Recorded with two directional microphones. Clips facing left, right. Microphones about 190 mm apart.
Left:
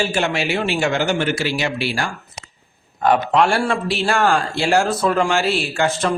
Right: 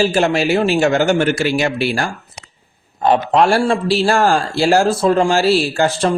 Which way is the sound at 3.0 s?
35° right (ahead or behind).